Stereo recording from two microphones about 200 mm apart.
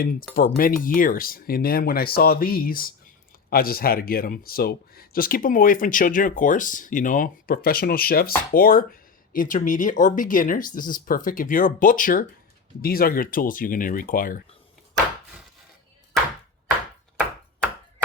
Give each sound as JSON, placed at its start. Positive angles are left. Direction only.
{"t": 0.3, "sound": "speech", "side_deg": 45}